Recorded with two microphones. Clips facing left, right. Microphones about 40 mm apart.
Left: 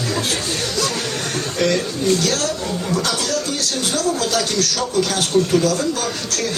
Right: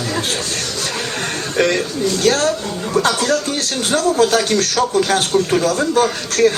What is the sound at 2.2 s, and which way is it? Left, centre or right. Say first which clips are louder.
A man's voice: right 5 dB; right.